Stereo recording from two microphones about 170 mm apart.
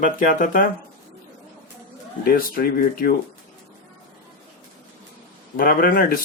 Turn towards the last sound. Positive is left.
turn(degrees=55)  # may be behind; listen again after turning